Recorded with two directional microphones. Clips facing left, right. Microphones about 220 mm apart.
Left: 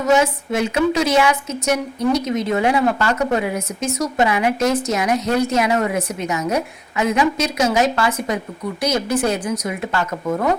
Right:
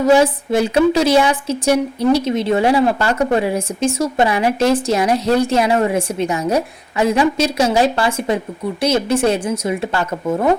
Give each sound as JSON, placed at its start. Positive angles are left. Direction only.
{"t": 0.0, "sound": "a woman's voice", "side_deg": -30}